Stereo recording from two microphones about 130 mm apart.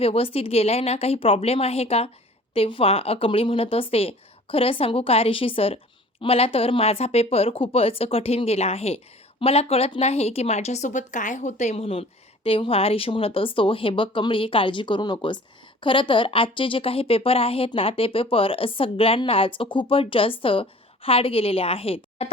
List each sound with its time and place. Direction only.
0.0 s speech: 45° left (ahead or behind)